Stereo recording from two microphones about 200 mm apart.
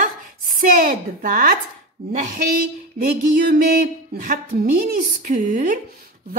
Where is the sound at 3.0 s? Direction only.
45° right (ahead or behind).